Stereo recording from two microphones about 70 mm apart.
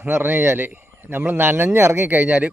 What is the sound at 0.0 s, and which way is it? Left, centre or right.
A man's voice, right.